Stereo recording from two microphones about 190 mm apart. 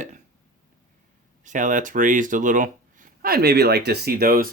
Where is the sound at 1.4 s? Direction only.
40° right (ahead or behind).